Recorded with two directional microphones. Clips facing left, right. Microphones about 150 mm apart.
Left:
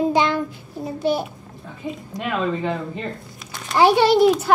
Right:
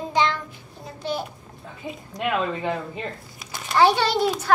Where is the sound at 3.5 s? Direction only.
Centre (ahead or behind).